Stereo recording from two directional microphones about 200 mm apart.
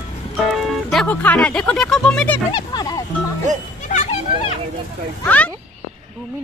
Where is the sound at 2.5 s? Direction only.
20° left (ahead or behind).